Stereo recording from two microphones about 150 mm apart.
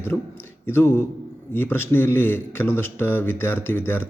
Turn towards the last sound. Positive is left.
turn(degrees=15)  # may be behind; listen again after turning